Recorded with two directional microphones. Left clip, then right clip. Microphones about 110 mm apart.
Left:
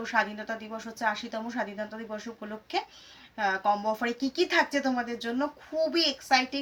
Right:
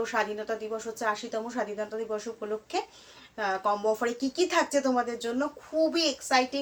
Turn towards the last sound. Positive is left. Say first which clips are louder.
# even
turn(degrees=-30)  # may be behind; listen again after turning